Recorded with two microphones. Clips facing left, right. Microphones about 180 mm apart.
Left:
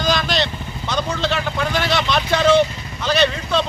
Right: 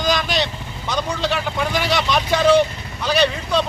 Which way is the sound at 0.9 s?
10° right (ahead or behind).